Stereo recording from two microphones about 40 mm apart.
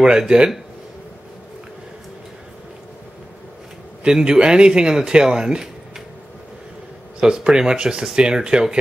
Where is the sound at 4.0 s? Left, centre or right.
Centre.